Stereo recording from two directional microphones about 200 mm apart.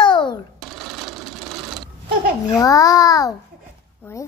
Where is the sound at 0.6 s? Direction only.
Centre (ahead or behind).